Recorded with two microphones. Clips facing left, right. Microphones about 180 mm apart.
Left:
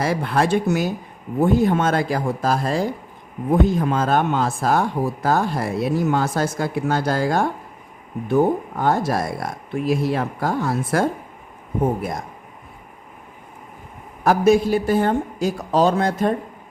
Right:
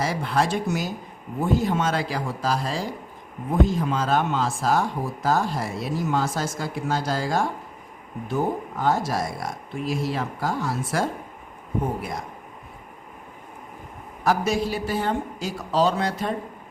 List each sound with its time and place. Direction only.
0.0 s speech: 55° left (ahead or behind)
14.3 s speech: 55° left (ahead or behind)